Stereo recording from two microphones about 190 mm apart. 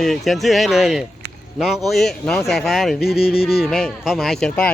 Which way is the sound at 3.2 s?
30° left (ahead or behind).